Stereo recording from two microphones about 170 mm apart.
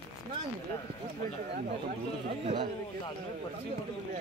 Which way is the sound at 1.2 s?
55° right (ahead or behind).